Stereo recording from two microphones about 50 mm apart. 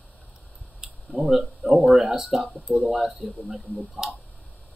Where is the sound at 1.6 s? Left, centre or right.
Centre.